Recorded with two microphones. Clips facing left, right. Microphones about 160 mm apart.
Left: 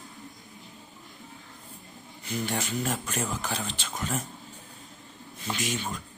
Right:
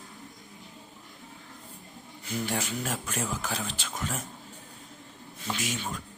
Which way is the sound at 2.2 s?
5° right (ahead or behind).